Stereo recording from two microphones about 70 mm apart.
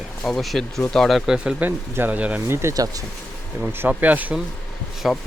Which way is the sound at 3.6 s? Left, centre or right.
Right.